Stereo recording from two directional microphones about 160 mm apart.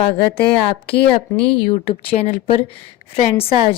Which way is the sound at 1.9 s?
35° left (ahead or behind).